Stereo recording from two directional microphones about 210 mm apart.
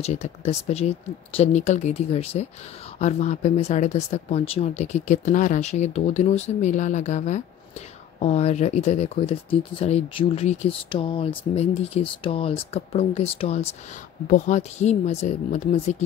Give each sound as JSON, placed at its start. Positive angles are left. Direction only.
{"t": 0.0, "sound": "speech", "side_deg": 30}